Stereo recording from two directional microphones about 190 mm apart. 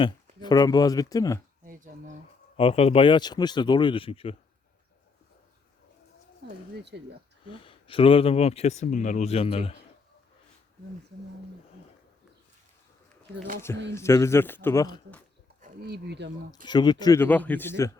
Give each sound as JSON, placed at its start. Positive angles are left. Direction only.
{"t": 0.4, "sound": "speech", "side_deg": 20}
{"t": 1.6, "sound": "a sound", "side_deg": -45}
{"t": 2.6, "sound": "speech", "side_deg": 30}
{"t": 6.9, "sound": "speech", "side_deg": -65}
{"t": 7.6, "sound": "speech", "side_deg": 30}
{"t": 13.9, "sound": "a man's voice", "side_deg": 15}
{"t": 15.8, "sound": "speech", "side_deg": -60}
{"t": 16.6, "sound": "a man's voice", "side_deg": 25}